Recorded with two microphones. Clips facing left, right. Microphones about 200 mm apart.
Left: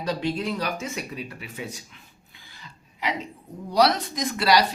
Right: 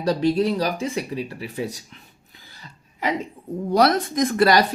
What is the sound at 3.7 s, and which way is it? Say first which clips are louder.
Speech: right 3 dB; 50° right (ahead or behind).